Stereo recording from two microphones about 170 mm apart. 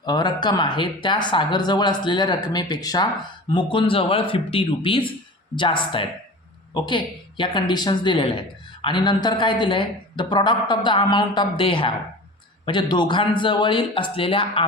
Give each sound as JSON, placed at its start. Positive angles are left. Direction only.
{"t": 0.0, "sound": "a man's voice", "side_deg": 25}